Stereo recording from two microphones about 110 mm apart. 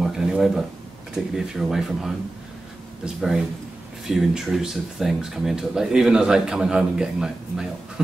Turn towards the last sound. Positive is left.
turn(degrees=-5)  # may be behind; listen again after turning